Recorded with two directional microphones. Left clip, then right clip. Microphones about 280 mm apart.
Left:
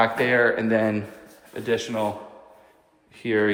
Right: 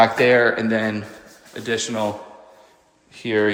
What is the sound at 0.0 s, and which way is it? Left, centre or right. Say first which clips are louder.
Speech: right 5 dB; centre.